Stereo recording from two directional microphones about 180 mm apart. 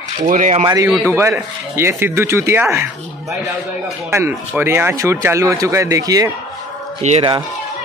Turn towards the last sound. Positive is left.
turn(degrees=-35)  # may be behind; listen again after turning